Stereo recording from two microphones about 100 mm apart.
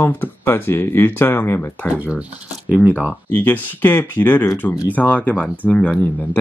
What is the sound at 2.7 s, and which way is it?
Speech, 15° right (ahead or behind).